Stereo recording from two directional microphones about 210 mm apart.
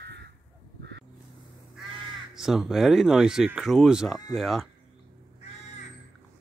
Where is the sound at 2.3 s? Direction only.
Centre (ahead or behind).